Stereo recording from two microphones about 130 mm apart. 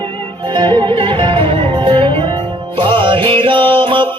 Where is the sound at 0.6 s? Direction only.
40° right (ahead or behind).